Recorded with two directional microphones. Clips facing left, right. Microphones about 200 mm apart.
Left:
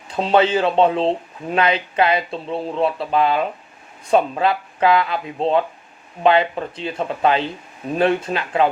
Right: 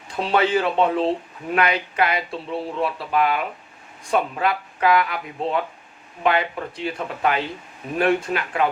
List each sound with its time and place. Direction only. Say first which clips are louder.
0.2 s speech: left 4 dB; 20° left (ahead or behind)